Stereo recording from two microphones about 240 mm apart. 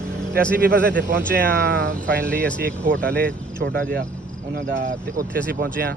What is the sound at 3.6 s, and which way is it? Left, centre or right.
Speech, right.